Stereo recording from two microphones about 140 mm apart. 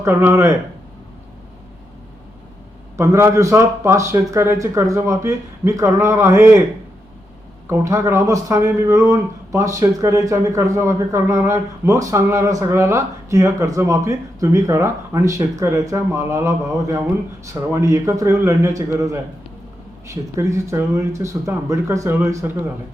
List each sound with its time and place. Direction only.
0.0 s speech: 20° right (ahead or behind)
3.0 s speech: 20° right (ahead or behind)
7.7 s speech: 20° right (ahead or behind)